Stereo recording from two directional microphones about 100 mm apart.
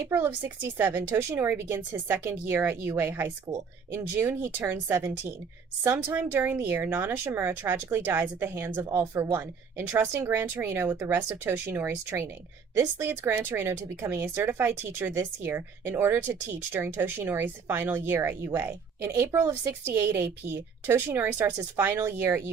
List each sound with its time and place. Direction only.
0.1 s speech: 20° right (ahead or behind)
5.8 s speech: 20° right (ahead or behind)